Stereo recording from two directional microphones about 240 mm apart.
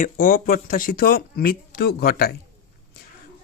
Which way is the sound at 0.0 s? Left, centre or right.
Left.